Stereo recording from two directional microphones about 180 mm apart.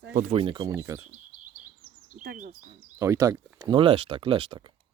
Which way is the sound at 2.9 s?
15° right (ahead or behind).